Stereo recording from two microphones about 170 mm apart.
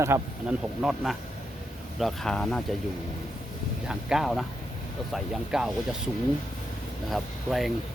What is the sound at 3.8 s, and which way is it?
Speech, centre (ahead or behind).